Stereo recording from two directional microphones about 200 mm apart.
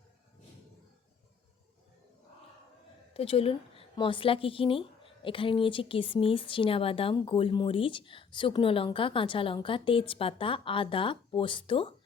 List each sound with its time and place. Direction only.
3.1 s a woman's voice: 30° left (ahead or behind)